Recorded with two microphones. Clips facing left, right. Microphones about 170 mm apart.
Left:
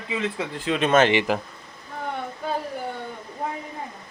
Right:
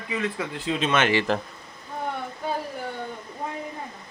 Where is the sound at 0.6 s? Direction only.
70° left (ahead or behind).